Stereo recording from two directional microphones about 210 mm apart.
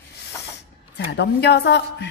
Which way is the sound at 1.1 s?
55° left (ahead or behind).